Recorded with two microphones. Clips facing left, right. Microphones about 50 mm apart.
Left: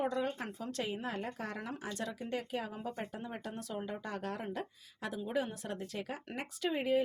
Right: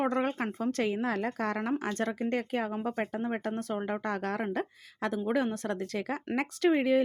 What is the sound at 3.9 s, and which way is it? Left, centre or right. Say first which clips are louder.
Speech: right 8 dB; right.